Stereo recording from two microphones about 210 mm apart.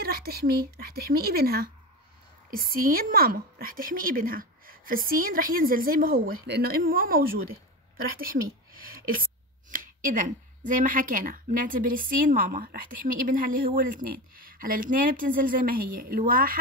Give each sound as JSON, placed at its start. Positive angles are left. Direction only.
{"t": 0.0, "sound": "a woman's voice", "side_deg": -45}
{"t": 9.7, "sound": "a woman's voice", "side_deg": -40}